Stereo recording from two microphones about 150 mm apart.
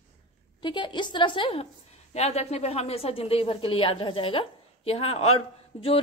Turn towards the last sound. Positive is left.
turn(degrees=40)  # may be behind; listen again after turning